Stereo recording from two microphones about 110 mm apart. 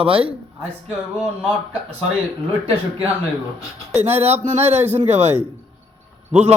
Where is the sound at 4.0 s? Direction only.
70° right (ahead or behind).